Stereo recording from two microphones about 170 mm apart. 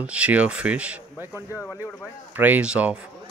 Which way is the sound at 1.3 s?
15° left (ahead or behind).